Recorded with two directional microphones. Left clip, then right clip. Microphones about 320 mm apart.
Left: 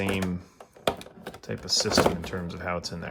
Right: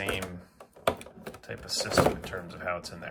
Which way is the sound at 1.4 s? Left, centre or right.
Centre.